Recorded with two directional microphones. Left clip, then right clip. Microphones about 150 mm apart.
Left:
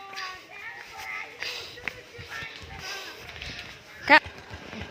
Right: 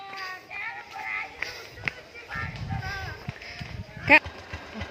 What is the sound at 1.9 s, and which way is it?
Music, 65° left (ahead or behind).